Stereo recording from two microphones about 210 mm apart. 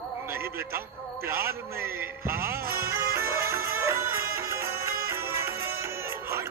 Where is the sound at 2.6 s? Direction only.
45° right (ahead or behind).